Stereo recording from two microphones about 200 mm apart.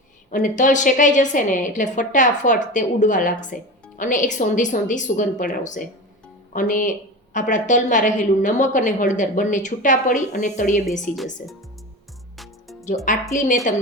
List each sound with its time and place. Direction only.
0.3 s a woman's voice: 40° left (ahead or behind)
11.0 s speech: centre (ahead or behind)
13.1 s a woman's voice: 40° left (ahead or behind)